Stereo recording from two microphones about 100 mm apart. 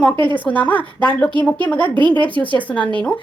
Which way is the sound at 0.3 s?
15° left (ahead or behind).